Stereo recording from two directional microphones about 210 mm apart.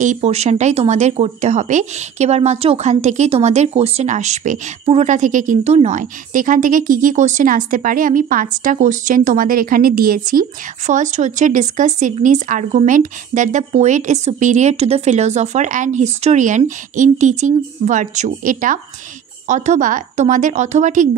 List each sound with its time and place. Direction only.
0.0 s speech: 35° right (ahead or behind)